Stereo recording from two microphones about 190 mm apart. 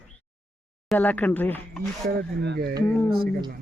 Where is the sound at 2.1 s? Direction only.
60° right (ahead or behind).